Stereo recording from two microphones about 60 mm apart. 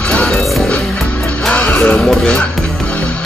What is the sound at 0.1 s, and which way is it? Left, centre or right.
Music, left.